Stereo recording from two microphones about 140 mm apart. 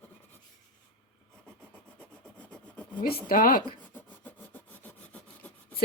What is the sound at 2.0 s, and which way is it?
Rub, 10° left (ahead or behind).